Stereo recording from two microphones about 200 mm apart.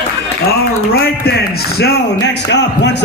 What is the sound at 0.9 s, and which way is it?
A man's voice, 50° left (ahead or behind).